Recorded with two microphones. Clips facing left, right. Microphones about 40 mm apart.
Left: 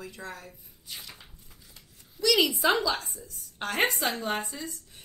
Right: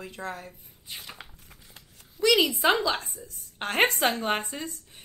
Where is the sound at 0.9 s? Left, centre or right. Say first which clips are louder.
Right 1 dB; right.